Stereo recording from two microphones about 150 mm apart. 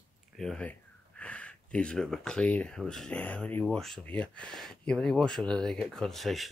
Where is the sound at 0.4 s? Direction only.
5° left (ahead or behind).